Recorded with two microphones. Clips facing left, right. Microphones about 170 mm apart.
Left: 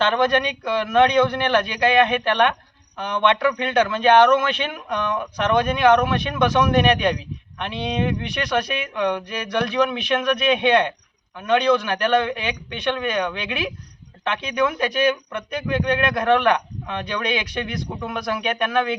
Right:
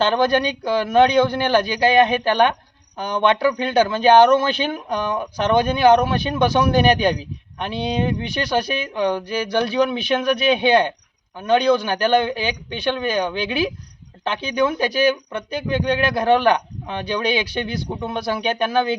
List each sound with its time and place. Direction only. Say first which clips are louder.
0.1 s speech: right 2 dB; 35° right (ahead or behind)